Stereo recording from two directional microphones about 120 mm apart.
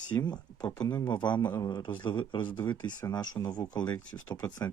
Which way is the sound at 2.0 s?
40° left (ahead or behind).